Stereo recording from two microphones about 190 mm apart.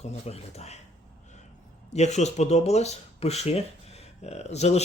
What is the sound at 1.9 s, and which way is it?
Speech, 35° left (ahead or behind).